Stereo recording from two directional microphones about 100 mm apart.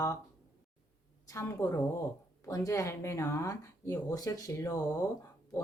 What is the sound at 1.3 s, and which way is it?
Speech, 25° left (ahead or behind).